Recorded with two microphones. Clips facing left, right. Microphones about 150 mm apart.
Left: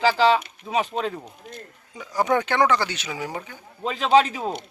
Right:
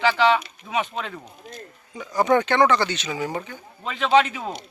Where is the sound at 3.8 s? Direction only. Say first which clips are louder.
Left 1 dB; 35° left (ahead or behind).